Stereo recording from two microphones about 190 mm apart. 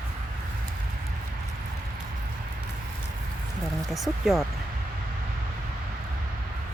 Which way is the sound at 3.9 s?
Centre (ahead or behind).